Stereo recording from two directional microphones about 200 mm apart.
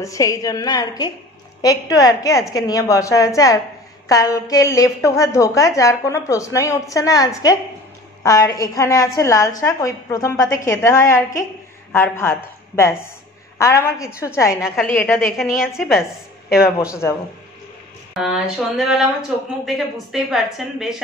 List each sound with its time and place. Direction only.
0.0 s a woman's voice: 15° left (ahead or behind)
15.3 s speech: centre (ahead or behind)
16.6 s a woman's voice: 15° left (ahead or behind)
18.1 s speech: centre (ahead or behind)